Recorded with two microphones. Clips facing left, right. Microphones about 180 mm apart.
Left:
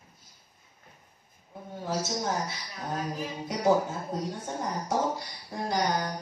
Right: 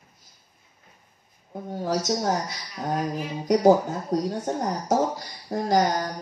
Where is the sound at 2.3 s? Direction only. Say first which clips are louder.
Right 5 dB; 40° right (ahead or behind).